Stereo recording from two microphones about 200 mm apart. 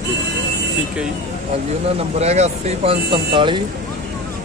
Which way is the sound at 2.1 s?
35° right (ahead or behind).